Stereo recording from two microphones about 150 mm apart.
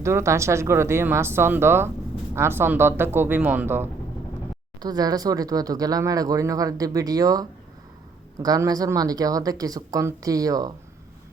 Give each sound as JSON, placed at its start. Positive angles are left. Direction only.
{"t": 0.0, "sound": "a woman's voice", "side_deg": -20}
{"t": 4.8, "sound": "speech", "side_deg": -25}